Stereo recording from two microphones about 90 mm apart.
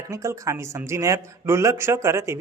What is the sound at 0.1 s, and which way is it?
Speech, 35° right (ahead or behind).